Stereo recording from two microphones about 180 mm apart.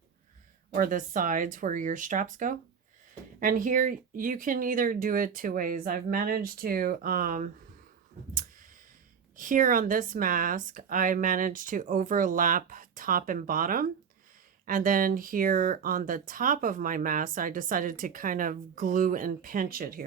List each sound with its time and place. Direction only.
0.7 s speech: 50° right (ahead or behind)
9.3 s speech: 50° right (ahead or behind)